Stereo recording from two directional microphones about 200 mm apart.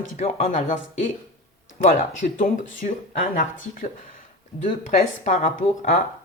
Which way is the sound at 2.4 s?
40° left (ahead or behind).